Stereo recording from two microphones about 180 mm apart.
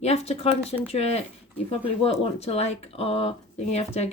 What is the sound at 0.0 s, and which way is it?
Speech, 35° left (ahead or behind).